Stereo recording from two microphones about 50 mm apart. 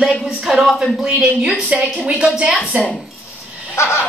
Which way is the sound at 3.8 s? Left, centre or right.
Left.